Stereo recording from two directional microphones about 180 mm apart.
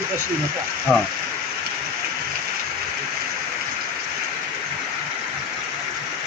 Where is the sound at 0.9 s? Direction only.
Centre (ahead or behind).